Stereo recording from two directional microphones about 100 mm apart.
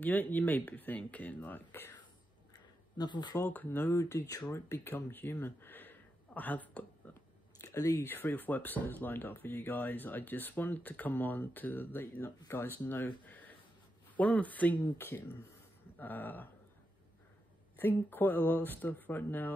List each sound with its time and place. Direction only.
0.0 s speech: 20° left (ahead or behind)
3.0 s speech: 50° left (ahead or behind)
3.4 s speech: 20° left (ahead or behind)
4.0 s speech: 35° left (ahead or behind); by 6.9 s 15° left (ahead or behind)
7.6 s speech: 30° left (ahead or behind)
17.7 s speech: 20° left (ahead or behind)